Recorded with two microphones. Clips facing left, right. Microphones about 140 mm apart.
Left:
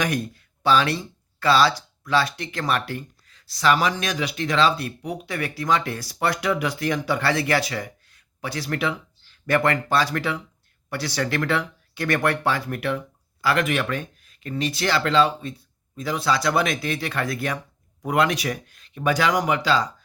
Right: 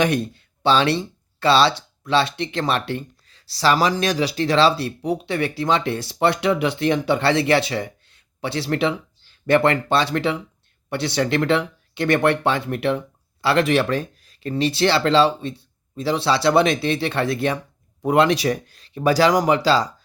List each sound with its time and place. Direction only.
0.0 s speech: 25° right (ahead or behind)